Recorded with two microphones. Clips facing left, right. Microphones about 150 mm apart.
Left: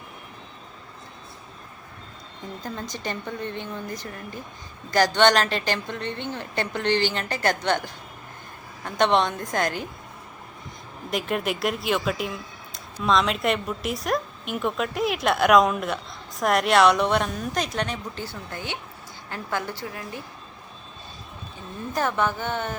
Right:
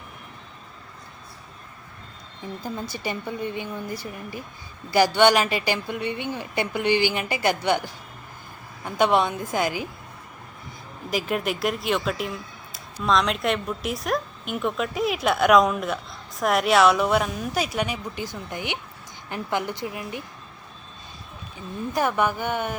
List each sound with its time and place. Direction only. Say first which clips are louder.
2.6 s a woman's voice: right 2 dB; 10° right (ahead or behind)
11.1 s a woman's voice: right 1 dB; centre (ahead or behind); by 20.2 s 20° right (ahead or behind)
21.9 s a woman's voice: right 1 dB; 10° right (ahead or behind)